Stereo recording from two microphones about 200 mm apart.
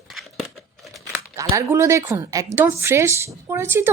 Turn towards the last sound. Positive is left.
turn(degrees=-10)  # may be behind; listen again after turning